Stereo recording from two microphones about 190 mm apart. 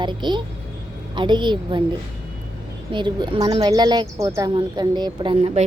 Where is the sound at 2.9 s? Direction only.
25° right (ahead or behind).